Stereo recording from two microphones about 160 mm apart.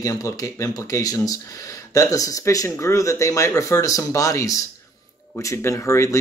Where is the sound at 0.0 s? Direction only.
20° left (ahead or behind).